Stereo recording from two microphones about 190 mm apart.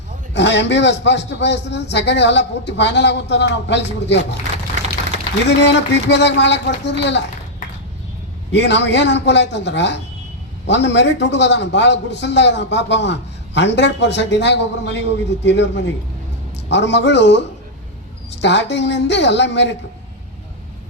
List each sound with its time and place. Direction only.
0.3 s a man's voice: 65° left (ahead or behind)
5.5 s a man's voice: 65° left (ahead or behind)
8.5 s a man's voice: 65° left (ahead or behind)